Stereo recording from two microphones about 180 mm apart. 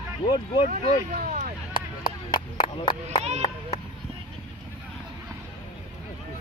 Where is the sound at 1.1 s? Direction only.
45° right (ahead or behind).